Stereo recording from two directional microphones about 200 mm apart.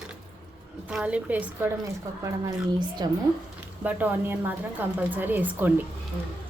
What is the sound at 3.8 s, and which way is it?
A woman's voice, 10° right (ahead or behind).